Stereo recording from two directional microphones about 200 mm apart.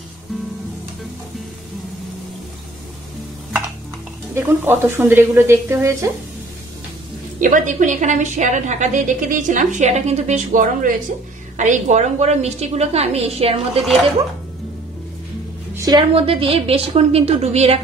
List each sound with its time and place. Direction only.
4.4 s a woman's voice: 10° right (ahead or behind)
7.3 s a woman's voice: 40° right (ahead or behind)
15.7 s a woman's voice: 20° right (ahead or behind)